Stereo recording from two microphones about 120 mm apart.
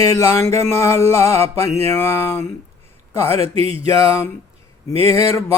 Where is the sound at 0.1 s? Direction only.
25° left (ahead or behind).